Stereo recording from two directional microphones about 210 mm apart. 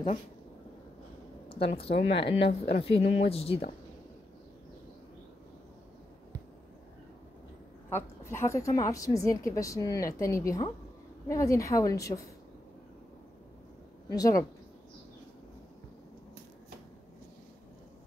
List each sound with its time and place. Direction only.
1.6 s speech: 25° left (ahead or behind)
2.3 s speech: 50° left (ahead or behind)
2.8 s speech: 25° left (ahead or behind)
7.9 s a woman's voice: 10° left (ahead or behind)
14.0 s speech: 15° left (ahead or behind)